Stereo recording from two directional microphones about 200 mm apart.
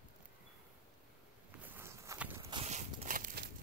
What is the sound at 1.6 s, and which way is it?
Walk, 10° right (ahead or behind).